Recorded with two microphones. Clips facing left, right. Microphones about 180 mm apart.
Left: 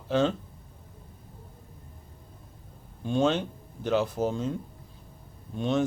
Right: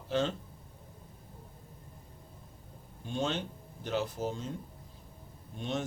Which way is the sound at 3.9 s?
70° left (ahead or behind).